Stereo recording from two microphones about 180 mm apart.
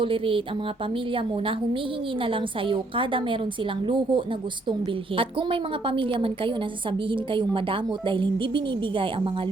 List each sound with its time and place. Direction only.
0.0 s a woman's voice: 30° right (ahead or behind)